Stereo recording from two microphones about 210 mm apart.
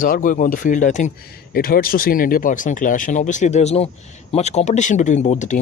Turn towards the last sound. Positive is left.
turn(degrees=35)  # may be behind; listen again after turning